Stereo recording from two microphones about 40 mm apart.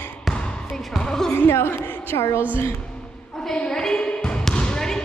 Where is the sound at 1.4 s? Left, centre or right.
Left.